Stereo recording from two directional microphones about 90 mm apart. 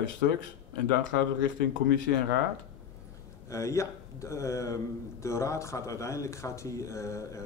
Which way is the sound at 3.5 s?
35° left (ahead or behind).